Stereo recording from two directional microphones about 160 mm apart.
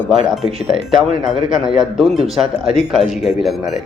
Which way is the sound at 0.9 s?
Centre (ahead or behind).